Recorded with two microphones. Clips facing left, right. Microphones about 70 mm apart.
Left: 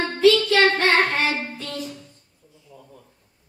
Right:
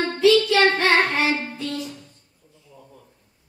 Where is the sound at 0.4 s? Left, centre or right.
Left.